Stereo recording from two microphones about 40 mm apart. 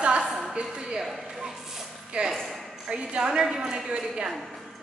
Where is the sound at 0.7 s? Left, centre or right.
Right.